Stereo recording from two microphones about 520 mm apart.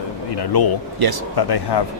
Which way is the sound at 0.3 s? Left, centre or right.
Left.